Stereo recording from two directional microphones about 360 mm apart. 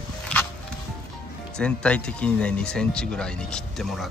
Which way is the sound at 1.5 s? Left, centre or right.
Centre.